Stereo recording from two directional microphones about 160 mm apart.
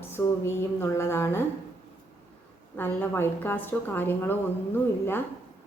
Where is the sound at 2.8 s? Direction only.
15° left (ahead or behind).